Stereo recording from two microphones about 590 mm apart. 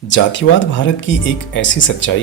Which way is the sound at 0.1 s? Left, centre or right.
Centre.